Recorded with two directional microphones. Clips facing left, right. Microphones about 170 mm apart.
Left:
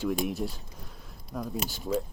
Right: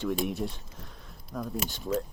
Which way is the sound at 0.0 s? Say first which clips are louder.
Left 1 dB; centre (ahead or behind).